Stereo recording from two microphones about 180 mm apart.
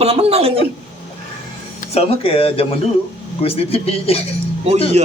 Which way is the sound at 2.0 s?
30° left (ahead or behind).